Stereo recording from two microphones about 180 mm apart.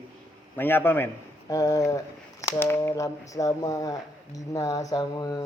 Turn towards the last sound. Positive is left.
turn(degrees=20)  # may be behind; listen again after turning